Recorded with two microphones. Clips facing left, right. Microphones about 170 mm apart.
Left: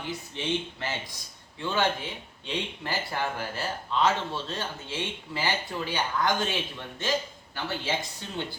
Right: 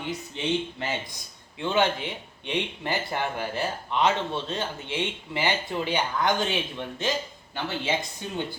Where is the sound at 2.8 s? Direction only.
20° right (ahead or behind).